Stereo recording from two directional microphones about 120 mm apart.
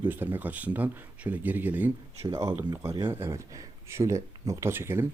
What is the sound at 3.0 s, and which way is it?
Speech, 20° right (ahead or behind).